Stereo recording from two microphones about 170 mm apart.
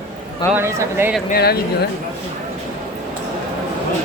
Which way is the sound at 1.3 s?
65° left (ahead or behind).